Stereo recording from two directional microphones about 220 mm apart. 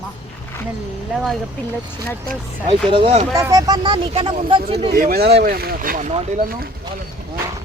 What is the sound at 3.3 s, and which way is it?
Speech, 15° right (ahead or behind).